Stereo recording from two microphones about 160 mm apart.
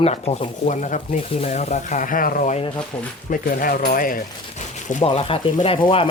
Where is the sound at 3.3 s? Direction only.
60° left (ahead or behind).